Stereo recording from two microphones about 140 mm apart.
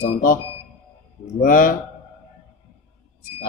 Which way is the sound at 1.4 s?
85° left.